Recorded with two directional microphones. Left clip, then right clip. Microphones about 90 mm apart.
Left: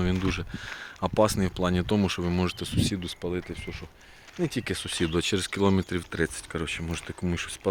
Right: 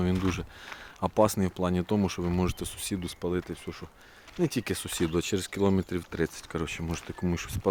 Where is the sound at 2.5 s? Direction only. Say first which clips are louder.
Left 5 dB; 40° right (ahead or behind).